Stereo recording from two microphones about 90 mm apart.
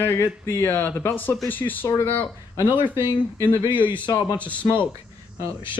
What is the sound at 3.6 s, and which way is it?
Speech, 65° left (ahead or behind).